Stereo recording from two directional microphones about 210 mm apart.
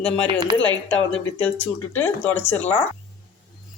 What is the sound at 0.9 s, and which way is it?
Speech, 5° left (ahead or behind).